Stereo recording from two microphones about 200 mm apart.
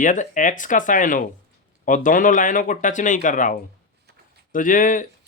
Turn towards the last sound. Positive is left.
turn(degrees=40)  # may be behind; listen again after turning